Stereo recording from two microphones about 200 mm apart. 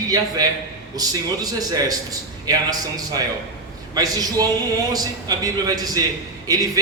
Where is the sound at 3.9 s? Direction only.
20° right (ahead or behind).